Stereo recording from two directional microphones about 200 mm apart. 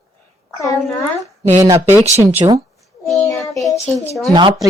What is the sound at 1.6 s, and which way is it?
Speech, 15° right (ahead or behind).